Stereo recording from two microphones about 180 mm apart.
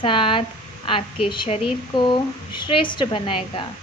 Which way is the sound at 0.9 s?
30° left (ahead or behind).